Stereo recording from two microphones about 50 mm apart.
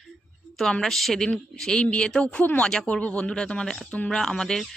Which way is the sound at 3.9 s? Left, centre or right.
Left.